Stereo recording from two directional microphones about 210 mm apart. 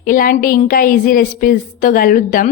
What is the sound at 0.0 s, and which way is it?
A woman's voice, 40° left (ahead or behind).